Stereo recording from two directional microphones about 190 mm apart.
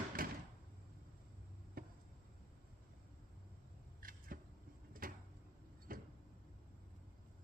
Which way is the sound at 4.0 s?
50° right (ahead or behind).